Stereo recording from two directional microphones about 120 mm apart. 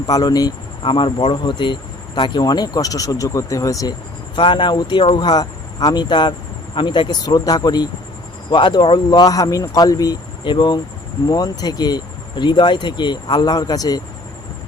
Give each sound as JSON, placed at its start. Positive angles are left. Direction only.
{"t": 0.0, "sound": "speech", "side_deg": 30}
{"t": 4.4, "sound": "speech", "side_deg": 40}